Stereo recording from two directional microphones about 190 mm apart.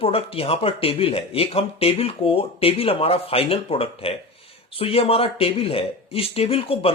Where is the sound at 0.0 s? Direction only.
30° left (ahead or behind).